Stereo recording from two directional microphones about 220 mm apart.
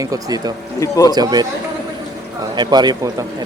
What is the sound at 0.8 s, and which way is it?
Speech, 15° left (ahead or behind).